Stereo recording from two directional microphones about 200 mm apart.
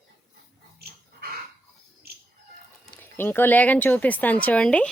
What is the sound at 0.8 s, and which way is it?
Dog, 55° right (ahead or behind).